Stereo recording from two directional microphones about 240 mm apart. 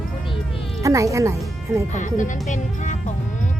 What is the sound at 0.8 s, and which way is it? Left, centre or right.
Speech, centre.